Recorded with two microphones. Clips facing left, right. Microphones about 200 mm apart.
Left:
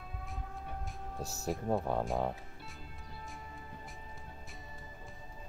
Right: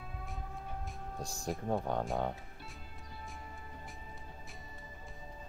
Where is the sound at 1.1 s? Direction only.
5° left (ahead or behind).